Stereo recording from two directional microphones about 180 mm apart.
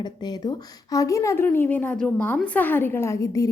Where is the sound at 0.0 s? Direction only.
25° left (ahead or behind).